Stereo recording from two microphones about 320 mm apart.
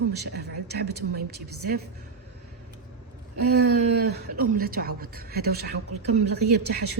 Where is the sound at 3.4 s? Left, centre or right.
Right.